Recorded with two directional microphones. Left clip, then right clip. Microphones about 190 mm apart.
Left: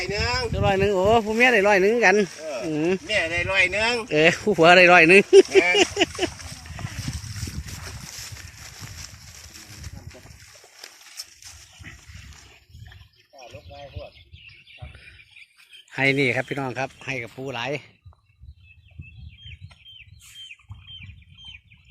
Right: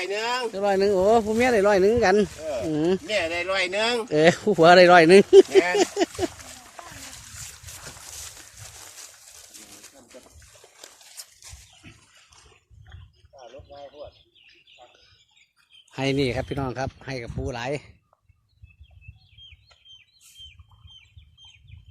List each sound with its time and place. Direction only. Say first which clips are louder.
0.3 s speech: even; 10° right (ahead or behind)
2.7 s speech: even; 5° right (ahead or behind)
3.0 s speech: left 2 dB; 5° left (ahead or behind)
4.1 s speech: even; centre (ahead or behind)
6.3 s a sound: left 3 dB; 5° right (ahead or behind)
13.4 s bird: left 1 dB; 30° left (ahead or behind)
15.9 s speech: left 4 dB; centre (ahead or behind)